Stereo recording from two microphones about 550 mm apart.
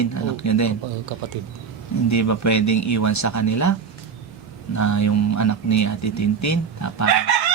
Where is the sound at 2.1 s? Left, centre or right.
Left.